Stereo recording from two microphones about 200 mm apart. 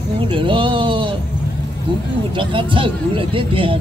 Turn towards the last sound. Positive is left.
turn(degrees=-25)  # may be behind; listen again after turning